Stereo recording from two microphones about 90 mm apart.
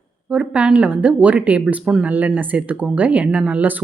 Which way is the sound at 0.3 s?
10° right (ahead or behind).